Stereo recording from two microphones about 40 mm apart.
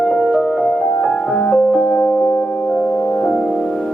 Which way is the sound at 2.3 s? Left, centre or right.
Left.